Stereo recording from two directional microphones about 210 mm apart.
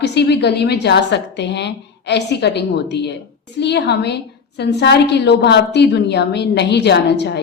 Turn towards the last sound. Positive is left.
turn(degrees=55)  # may be behind; listen again after turning